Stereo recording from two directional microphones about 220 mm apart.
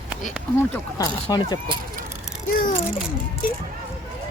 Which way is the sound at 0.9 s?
15° left (ahead or behind).